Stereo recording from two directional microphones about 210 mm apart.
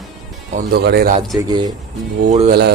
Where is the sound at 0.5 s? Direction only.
50° right (ahead or behind).